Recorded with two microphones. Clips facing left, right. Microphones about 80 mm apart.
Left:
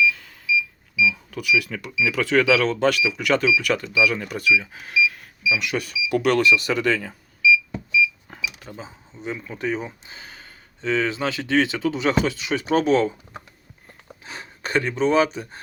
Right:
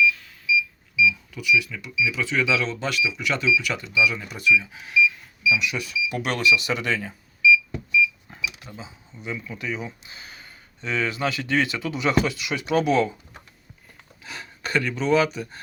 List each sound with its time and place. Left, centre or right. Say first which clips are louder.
1.3 s speech: left 1 dB; left
8.3 s cash register: left 3 dB; left
8.6 s speech: left 3 dB; left
14.3 s speech: left 1 dB; left